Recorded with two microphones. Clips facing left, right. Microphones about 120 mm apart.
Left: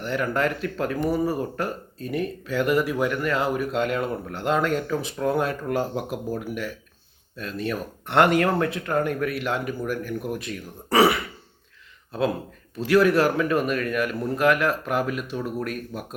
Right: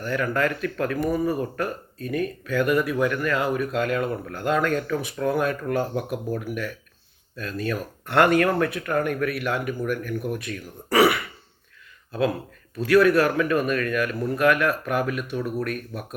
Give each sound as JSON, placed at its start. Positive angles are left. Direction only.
{"t": 0.0, "sound": "speech", "side_deg": 25}
{"t": 12.8, "sound": "speech", "side_deg": 25}